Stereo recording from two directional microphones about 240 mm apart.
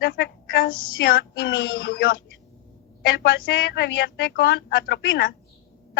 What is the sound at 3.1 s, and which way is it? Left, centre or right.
A woman's voice, left.